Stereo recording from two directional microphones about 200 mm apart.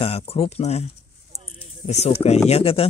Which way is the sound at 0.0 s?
30° left (ahead or behind).